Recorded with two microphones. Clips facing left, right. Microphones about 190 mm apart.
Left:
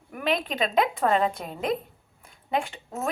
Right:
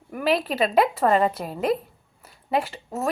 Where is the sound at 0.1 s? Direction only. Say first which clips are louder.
Right 4 dB; 5° right (ahead or behind).